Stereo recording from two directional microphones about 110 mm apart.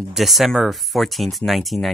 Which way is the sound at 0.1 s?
Centre (ahead or behind).